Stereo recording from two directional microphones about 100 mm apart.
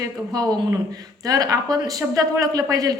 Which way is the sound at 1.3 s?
40° right (ahead or behind).